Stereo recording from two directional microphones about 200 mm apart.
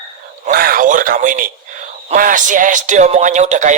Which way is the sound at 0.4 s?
45° right (ahead or behind).